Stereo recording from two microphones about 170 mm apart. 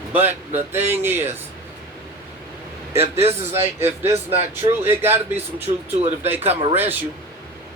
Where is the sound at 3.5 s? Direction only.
15° right (ahead or behind).